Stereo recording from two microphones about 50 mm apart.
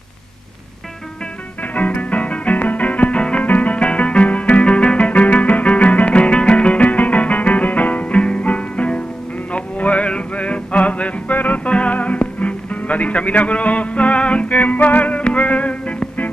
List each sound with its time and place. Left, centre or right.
1.8 s music: left